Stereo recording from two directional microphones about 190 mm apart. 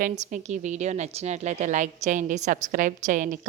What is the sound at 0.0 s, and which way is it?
A woman's voice, 40° right (ahead or behind).